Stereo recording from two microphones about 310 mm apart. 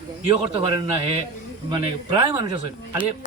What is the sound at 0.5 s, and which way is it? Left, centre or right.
A man's voice, centre.